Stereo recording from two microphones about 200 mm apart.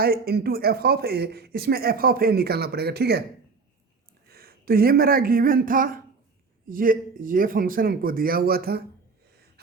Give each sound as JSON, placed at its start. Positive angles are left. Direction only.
{"t": 0.0, "sound": "speech", "side_deg": -50}
{"t": 4.3, "sound": "speech", "side_deg": -50}